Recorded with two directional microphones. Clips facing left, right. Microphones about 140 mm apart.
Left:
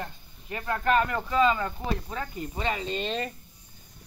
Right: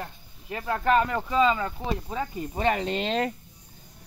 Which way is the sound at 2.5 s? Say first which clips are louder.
Right 5 dB; 55° right (ahead or behind).